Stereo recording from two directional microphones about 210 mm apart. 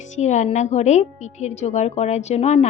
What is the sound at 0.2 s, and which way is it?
A woman's voice, 35° left (ahead or behind).